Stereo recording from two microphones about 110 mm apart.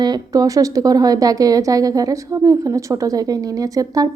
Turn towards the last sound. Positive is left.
turn(degrees=-35)  # may be behind; listen again after turning